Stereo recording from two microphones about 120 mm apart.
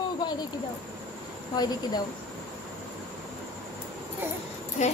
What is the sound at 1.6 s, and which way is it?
Speech, 35° left (ahead or behind).